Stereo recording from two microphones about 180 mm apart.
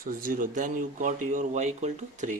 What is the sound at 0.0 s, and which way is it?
Speech, 50° right (ahead or behind).